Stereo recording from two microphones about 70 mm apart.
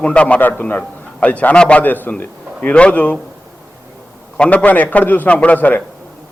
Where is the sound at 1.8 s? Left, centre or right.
Left.